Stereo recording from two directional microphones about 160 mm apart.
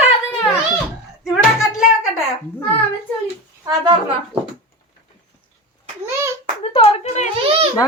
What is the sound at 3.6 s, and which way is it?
Speech, 30° right (ahead or behind).